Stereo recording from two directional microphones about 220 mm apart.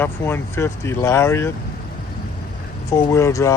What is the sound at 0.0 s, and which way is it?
Speech, 10° left (ahead or behind).